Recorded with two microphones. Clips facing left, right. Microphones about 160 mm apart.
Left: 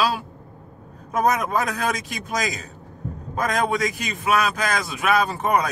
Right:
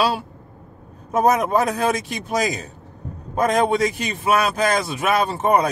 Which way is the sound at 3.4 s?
30° right (ahead or behind).